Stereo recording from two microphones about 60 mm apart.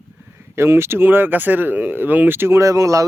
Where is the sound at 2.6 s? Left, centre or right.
Right.